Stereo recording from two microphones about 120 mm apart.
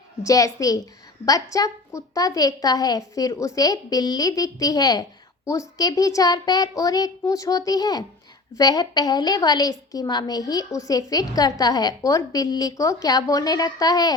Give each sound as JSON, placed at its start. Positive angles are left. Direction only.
{"t": 0.2, "sound": "a child's voice", "side_deg": 30}